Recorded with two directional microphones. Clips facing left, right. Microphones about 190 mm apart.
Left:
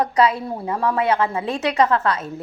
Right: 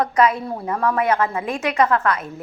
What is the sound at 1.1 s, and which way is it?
A woman's voice, 30° left (ahead or behind).